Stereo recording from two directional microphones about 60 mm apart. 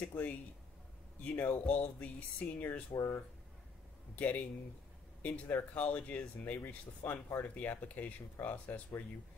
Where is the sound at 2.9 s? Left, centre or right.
Left.